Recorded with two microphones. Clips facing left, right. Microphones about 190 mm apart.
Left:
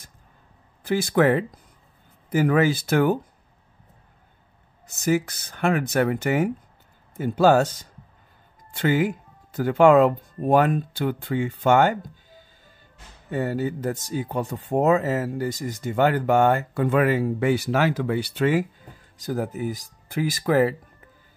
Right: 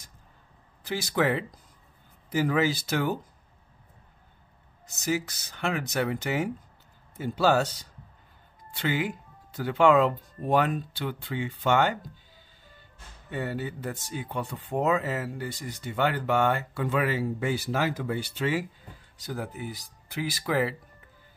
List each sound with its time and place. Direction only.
0.8 s speech: 55° left (ahead or behind)
4.8 s speech: 55° left (ahead or behind)
13.3 s speech: 40° left (ahead or behind)
19.1 s speech: 45° left (ahead or behind)